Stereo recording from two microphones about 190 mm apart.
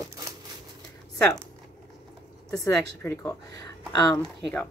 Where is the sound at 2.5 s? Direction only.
15° left (ahead or behind).